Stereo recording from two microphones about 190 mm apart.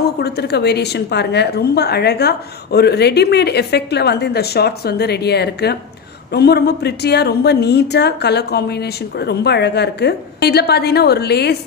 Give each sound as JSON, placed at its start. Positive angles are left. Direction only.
{"t": 0.2, "sound": "a woman's voice", "side_deg": 60}